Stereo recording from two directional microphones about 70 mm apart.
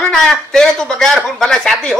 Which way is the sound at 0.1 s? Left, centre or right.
Centre.